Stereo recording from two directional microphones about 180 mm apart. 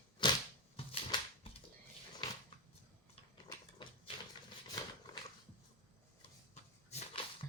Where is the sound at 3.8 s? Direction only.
25° left (ahead or behind).